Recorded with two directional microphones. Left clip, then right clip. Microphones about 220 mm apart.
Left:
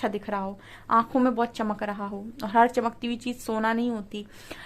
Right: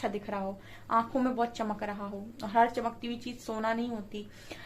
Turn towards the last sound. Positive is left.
turn(degrees=45)  # may be behind; listen again after turning